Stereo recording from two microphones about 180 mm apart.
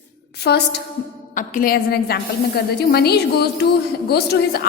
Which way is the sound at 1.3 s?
50° left (ahead or behind).